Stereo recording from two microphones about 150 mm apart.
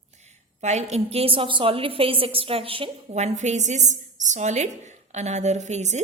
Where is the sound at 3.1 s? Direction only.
50° right (ahead or behind).